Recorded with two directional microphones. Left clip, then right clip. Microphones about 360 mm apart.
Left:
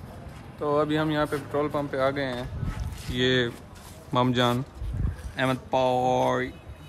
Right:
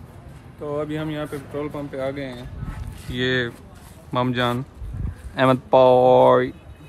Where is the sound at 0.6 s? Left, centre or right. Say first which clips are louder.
Left 3 dB; centre.